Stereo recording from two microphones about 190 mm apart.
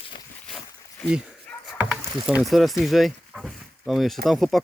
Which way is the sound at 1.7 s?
5° right (ahead or behind).